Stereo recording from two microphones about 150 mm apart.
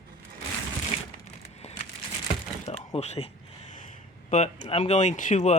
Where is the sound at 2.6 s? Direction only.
40° left (ahead or behind).